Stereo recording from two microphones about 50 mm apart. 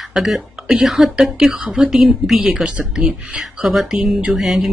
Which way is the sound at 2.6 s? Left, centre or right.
Centre.